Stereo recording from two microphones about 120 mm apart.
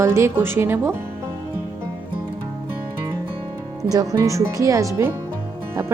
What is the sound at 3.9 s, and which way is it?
Speech, 30° right (ahead or behind).